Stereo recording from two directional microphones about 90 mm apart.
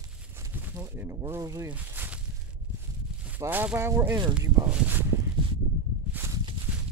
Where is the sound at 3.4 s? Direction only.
40° right (ahead or behind).